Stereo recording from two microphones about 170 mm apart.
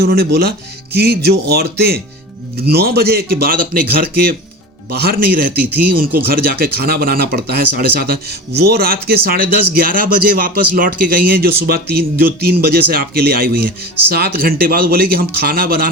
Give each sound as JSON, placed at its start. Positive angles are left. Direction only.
{"t": 0.0, "sound": "speech", "side_deg": -70}